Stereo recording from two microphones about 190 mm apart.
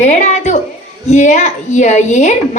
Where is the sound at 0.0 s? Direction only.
35° left (ahead or behind).